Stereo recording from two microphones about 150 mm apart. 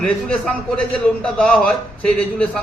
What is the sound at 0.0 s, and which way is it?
A man's voice, 10° left (ahead or behind).